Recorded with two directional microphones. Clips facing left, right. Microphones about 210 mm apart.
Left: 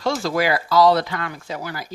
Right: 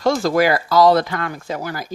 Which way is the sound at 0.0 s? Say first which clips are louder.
Right 5 dB; 45° right (ahead or behind).